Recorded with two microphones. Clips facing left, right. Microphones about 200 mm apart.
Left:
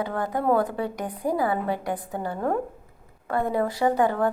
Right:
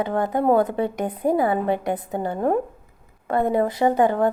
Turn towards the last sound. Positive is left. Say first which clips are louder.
# right 3 dB
turn(degrees=-20)  # may be behind; listen again after turning